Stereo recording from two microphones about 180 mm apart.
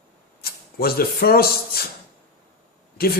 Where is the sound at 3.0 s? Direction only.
60° left (ahead or behind).